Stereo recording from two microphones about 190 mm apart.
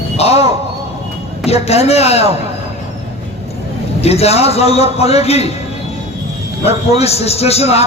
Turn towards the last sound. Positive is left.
turn(degrees=35)  # may be behind; listen again after turning